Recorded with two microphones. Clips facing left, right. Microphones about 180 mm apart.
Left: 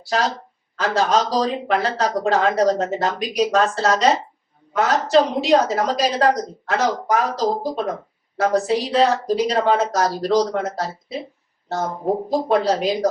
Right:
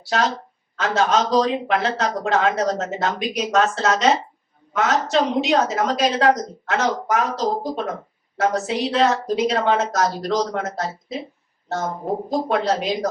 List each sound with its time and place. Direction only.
0.1 s speech: 35° left (ahead or behind)
12.1 s speech: centre (ahead or behind)
12.5 s speech: 35° left (ahead or behind)